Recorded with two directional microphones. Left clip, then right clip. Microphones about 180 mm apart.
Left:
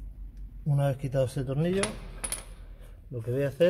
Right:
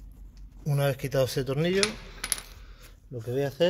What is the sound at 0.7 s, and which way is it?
Speech, 25° right (ahead or behind).